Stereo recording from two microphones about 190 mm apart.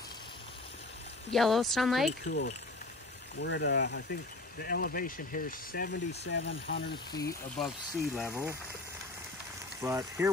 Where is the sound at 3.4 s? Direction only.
60° left (ahead or behind).